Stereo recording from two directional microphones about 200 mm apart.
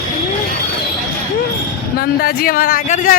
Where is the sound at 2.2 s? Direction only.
45° left (ahead or behind).